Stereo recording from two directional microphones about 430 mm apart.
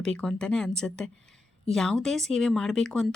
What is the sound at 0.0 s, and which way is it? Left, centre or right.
Speech, centre.